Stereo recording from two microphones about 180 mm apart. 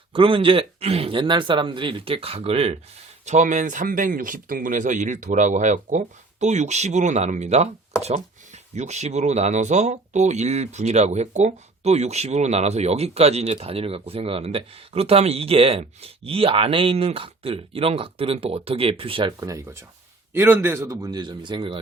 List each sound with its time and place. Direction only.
0.1 s speech: 30° right (ahead or behind)
8.7 s speech: 40° right (ahead or behind)